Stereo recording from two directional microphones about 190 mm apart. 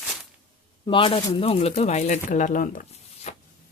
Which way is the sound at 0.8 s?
25° left (ahead or behind).